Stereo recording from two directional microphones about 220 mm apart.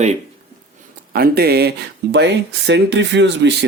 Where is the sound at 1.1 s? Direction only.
45° right (ahead or behind).